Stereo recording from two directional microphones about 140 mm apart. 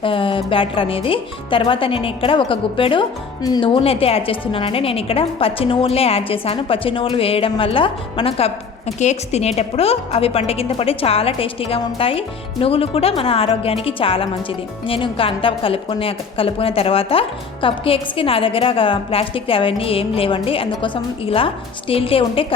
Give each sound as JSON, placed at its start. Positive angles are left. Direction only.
{"t": 0.0, "sound": "a woman's voice", "side_deg": 40}